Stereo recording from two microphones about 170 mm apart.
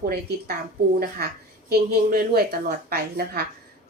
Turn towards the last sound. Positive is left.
turn(degrees=-65)  # may be behind; listen again after turning